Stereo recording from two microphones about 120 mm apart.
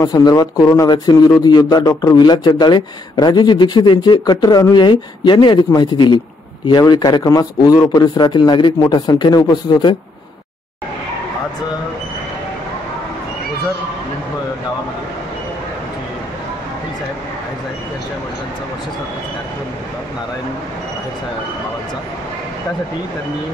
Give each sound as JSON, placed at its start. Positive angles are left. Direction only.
{"t": 0.0, "sound": "a man's voice", "side_deg": 35}